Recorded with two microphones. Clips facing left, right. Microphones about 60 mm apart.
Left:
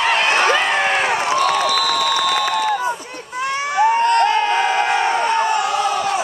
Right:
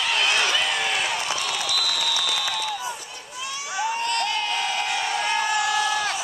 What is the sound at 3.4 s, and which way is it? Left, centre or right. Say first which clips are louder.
Crowd: left 11 dB; left.